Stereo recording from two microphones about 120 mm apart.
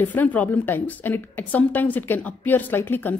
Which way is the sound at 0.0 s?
15° left (ahead or behind).